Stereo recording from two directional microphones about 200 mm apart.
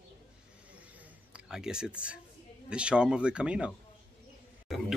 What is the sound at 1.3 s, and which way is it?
Speech, 5° right (ahead or behind).